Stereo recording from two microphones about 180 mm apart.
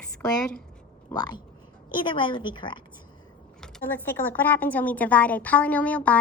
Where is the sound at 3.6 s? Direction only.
10° left (ahead or behind).